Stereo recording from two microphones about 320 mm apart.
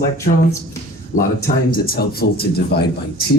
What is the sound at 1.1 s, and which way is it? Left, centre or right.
Speech, left.